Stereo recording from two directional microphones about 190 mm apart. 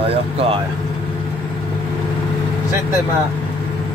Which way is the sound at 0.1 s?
30° right (ahead or behind).